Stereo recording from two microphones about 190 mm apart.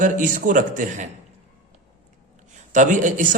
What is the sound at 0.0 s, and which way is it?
A man's voice, 40° right (ahead or behind).